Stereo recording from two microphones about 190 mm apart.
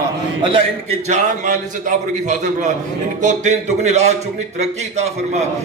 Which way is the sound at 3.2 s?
40° right (ahead or behind).